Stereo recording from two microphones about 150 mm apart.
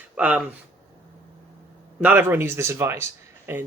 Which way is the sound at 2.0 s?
15° right (ahead or behind).